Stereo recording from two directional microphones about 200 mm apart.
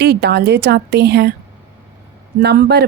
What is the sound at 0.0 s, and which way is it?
Speech, 55° right (ahead or behind).